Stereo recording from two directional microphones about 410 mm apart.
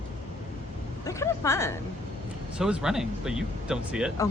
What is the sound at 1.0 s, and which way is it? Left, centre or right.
Speech, centre.